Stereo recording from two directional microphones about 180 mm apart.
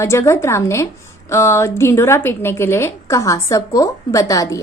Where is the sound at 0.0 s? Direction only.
15° left (ahead or behind).